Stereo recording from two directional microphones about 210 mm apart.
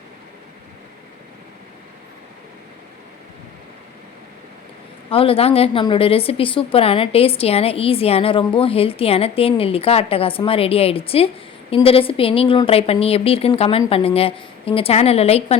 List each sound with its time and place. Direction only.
5.1 s a woman's voice: 25° left (ahead or behind)